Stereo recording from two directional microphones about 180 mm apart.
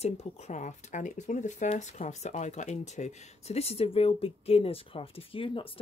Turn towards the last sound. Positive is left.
turn(degrees=30)  # may be behind; listen again after turning